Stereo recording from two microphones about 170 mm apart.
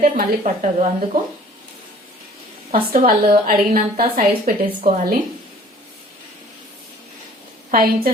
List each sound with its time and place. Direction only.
0.0 s speech: 55° right (ahead or behind)
2.7 s a woman's voice: 50° right (ahead or behind)
7.7 s a woman's voice: 55° right (ahead or behind)